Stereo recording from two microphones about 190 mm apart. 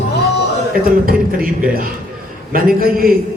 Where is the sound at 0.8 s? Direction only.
50° right (ahead or behind).